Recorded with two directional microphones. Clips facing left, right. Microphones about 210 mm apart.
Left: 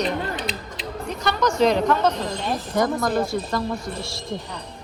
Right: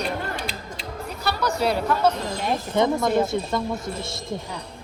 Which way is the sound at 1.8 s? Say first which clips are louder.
Left 1 dB; 10° right (ahead or behind).